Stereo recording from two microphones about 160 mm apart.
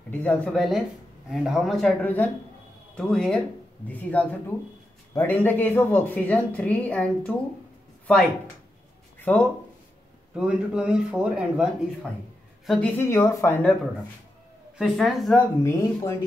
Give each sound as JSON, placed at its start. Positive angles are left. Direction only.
{"t": 0.1, "sound": "speech", "side_deg": 10}
{"t": 9.3, "sound": "speech", "side_deg": 10}
{"t": 10.3, "sound": "speech", "side_deg": -5}
{"t": 12.6, "sound": "a woman's voice", "side_deg": 0}
{"t": 12.9, "sound": "speech", "side_deg": 15}
{"t": 14.8, "sound": "speech", "side_deg": 0}
{"t": 15.6, "sound": "speech", "side_deg": 15}